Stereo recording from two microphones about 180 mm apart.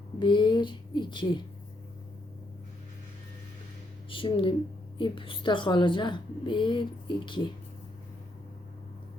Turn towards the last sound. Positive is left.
turn(degrees=25)  # may be behind; listen again after turning